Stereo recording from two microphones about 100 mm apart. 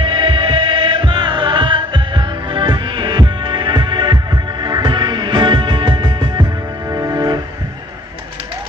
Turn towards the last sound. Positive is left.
turn(degrees=-35)  # may be behind; listen again after turning